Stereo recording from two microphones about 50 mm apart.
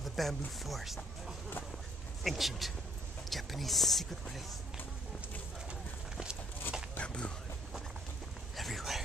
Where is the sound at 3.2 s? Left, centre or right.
Centre.